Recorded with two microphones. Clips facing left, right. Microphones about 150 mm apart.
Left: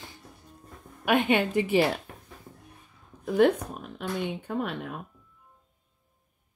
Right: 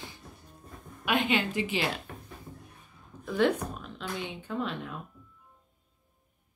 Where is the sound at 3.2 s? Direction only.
50° left (ahead or behind).